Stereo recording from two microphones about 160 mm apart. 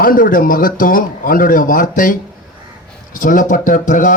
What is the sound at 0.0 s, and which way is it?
A man's voice, 60° left (ahead or behind).